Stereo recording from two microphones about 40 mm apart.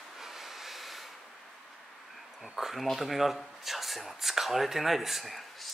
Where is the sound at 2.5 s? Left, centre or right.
Centre.